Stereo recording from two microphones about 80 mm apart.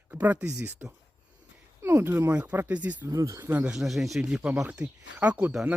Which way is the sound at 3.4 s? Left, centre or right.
Right.